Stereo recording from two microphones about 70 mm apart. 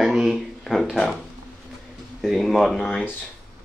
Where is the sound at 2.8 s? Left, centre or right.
Centre.